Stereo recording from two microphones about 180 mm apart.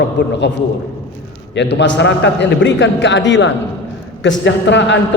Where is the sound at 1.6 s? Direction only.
75° left (ahead or behind).